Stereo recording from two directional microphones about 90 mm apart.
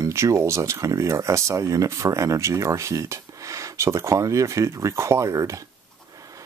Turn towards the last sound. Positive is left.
turn(degrees=-40)  # may be behind; listen again after turning